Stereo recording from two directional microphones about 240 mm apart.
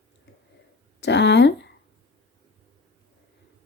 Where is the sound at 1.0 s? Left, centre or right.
Left.